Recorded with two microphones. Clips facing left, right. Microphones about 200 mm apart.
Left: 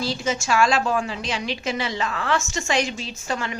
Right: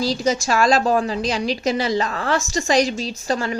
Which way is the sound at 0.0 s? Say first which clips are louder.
Right 5 dB; 40° right (ahead or behind).